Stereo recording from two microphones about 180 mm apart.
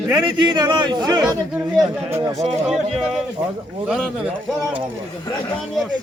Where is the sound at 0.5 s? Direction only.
25° right (ahead or behind).